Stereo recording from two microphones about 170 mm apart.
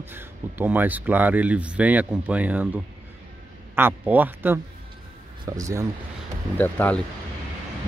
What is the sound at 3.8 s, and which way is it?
Speech, 10° right (ahead or behind).